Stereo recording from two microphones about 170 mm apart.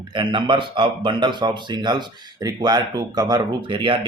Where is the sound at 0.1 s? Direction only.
25° right (ahead or behind).